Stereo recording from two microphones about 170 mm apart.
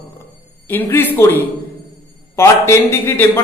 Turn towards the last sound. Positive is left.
turn(degrees=15)  # may be behind; listen again after turning